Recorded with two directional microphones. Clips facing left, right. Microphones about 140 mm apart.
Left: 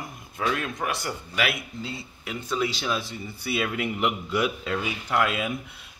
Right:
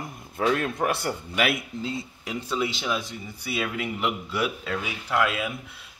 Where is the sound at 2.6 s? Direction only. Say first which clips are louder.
Left 1 dB; 20° right (ahead or behind).